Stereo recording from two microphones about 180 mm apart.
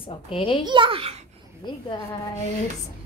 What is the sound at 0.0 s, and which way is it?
Speech, 30° left (ahead or behind).